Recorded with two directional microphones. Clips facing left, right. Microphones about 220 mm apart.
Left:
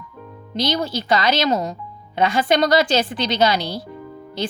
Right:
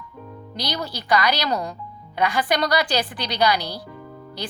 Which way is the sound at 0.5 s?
25° left (ahead or behind).